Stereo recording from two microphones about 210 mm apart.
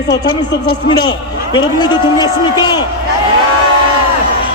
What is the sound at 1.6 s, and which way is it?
A man's voice, 20° left (ahead or behind).